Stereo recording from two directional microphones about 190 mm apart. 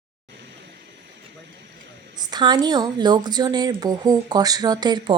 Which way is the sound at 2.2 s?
20° right (ahead or behind).